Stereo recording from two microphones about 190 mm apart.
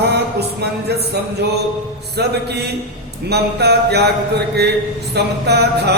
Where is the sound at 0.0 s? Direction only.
60° right (ahead or behind).